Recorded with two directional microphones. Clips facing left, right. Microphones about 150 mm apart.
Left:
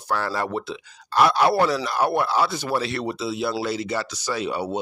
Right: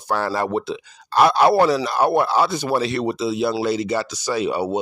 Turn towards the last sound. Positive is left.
turn(degrees=-15)  # may be behind; listen again after turning